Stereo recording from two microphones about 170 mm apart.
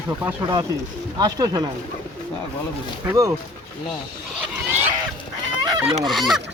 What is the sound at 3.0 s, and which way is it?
Speech, 15° right (ahead or behind).